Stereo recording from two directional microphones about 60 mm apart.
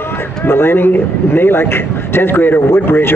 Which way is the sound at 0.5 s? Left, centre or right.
Left.